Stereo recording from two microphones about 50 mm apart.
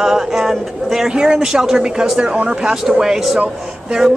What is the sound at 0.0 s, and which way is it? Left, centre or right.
Speech, centre.